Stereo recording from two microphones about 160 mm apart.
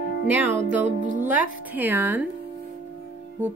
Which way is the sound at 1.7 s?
10° right (ahead or behind).